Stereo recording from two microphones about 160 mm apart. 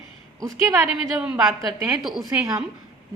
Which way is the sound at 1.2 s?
5° right (ahead or behind).